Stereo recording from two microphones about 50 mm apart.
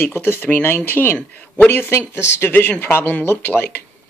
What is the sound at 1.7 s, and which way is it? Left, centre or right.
Speech, left.